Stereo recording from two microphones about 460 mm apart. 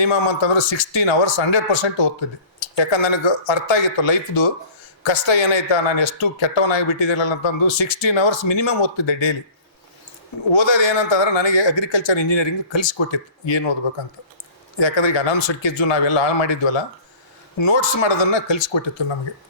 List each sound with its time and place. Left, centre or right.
0.0 s speech: left
10.6 s speech: left
14.8 s speech: left